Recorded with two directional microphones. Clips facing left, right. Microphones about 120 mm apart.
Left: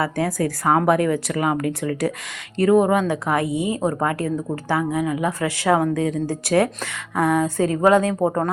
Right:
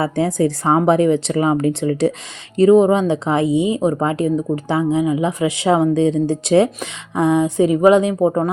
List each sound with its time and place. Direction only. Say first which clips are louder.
0.0 s speech: right 5 dB; 25° right (ahead or behind); by 8.4 s 10° right (ahead or behind)